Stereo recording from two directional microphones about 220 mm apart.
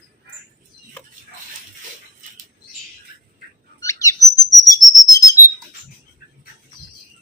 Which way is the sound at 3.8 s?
15° left (ahead or behind).